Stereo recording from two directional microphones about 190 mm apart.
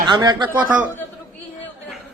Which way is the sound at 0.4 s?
10° right (ahead or behind).